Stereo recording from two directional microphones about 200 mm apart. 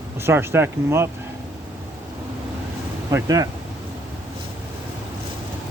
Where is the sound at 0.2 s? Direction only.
10° right (ahead or behind).